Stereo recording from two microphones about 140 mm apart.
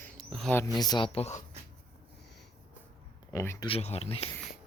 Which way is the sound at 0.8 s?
30° left (ahead or behind).